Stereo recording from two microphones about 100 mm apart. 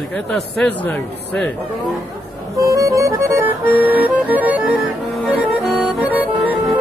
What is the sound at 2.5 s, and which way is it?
Music, 35° right (ahead or behind).